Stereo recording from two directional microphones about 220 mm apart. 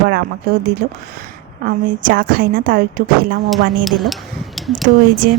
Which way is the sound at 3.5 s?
Centre (ahead or behind).